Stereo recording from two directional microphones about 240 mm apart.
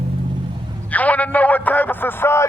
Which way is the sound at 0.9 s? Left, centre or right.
Centre.